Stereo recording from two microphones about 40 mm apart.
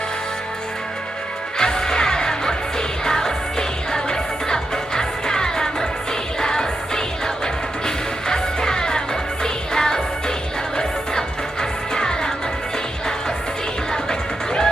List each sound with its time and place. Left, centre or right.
1.5 s music: centre
11.9 s music: centre
13.9 s music: centre